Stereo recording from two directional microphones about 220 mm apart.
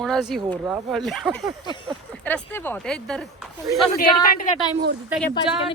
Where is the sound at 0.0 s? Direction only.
Centre (ahead or behind).